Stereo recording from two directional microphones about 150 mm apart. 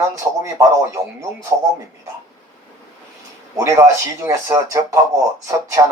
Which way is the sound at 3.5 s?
20° right (ahead or behind).